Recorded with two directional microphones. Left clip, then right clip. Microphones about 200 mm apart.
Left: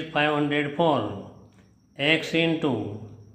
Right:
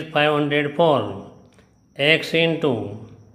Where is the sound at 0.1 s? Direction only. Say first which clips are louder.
Right 5 dB; 25° right (ahead or behind).